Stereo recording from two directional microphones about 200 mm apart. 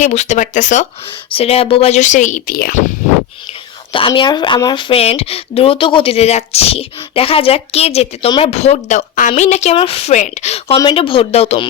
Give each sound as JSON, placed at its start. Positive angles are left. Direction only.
{"t": 0.0, "sound": "speech", "side_deg": 35}
{"t": 3.9, "sound": "speech", "side_deg": 25}